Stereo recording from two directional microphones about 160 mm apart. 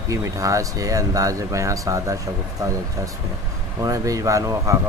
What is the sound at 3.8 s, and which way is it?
Speech, 20° right (ahead or behind).